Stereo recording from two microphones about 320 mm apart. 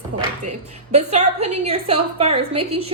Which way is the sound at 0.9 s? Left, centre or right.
Centre.